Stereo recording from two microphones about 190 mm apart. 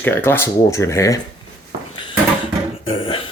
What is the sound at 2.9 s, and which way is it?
Beatboxing, 30° left (ahead or behind).